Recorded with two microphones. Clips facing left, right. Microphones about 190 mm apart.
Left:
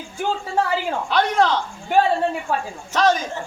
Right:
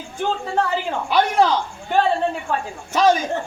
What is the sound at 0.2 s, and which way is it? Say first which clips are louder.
Speech: even; 10° left (ahead or behind).